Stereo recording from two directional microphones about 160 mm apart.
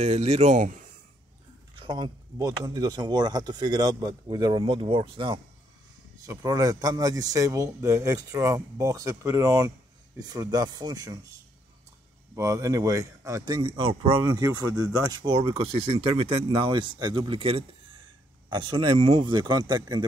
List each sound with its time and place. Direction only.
0.0 s speech: 40° right (ahead or behind)
1.8 s speech: 30° right (ahead or behind)
6.2 s speech: 20° right (ahead or behind)
12.4 s speech: 20° right (ahead or behind)